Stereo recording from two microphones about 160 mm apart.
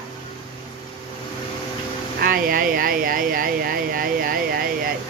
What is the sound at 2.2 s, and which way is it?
Speech, 65° right (ahead or behind).